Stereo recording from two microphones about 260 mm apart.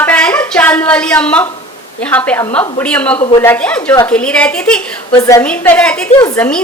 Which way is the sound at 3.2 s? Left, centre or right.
Centre.